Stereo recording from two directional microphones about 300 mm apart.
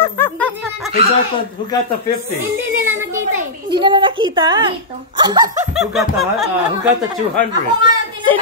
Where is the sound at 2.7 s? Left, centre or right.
Right.